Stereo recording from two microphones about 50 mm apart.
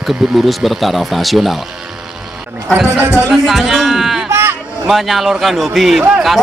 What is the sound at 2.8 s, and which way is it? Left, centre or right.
Speech, right.